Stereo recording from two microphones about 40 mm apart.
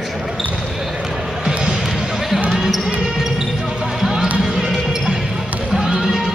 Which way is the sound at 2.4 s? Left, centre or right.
Centre.